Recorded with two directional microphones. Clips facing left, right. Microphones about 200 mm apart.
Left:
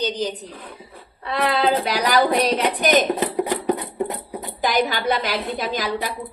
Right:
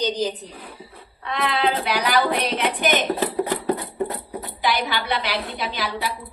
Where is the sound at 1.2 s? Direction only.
35° left (ahead or behind).